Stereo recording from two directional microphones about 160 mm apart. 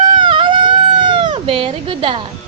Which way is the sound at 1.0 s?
35° right (ahead or behind).